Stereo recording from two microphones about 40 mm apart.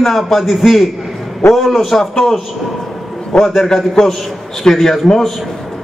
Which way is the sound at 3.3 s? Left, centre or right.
Centre.